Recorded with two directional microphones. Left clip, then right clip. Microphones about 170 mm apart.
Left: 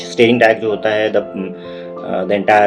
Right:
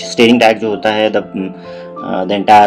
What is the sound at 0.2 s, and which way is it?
Speech, 45° right (ahead or behind).